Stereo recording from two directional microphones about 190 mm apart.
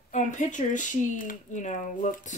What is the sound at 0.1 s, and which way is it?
Speech, 40° left (ahead or behind).